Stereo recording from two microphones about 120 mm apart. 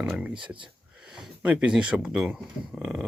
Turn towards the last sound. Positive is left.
turn(degrees=-5)  # may be behind; listen again after turning